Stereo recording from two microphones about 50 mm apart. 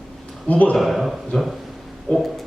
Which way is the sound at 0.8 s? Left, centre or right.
Centre.